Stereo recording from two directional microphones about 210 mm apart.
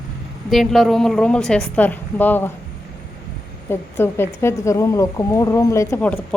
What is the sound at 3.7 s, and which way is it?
Speech, 10° left (ahead or behind).